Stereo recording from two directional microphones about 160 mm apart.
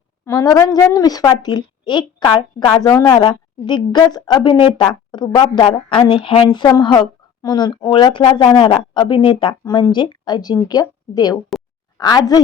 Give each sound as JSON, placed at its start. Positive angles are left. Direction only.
{"t": 0.3, "sound": "a woman's voice", "side_deg": 20}